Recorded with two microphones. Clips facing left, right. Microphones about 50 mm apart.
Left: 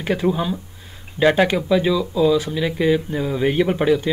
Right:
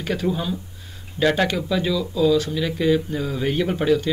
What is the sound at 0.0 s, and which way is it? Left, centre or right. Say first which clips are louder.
Speech: left 4 dB; left.